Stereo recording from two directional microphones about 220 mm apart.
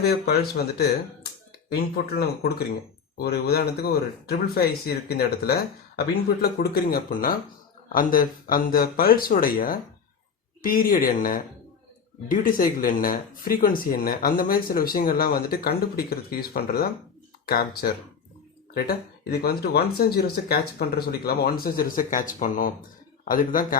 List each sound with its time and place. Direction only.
0.0 s speech: 45° left (ahead or behind)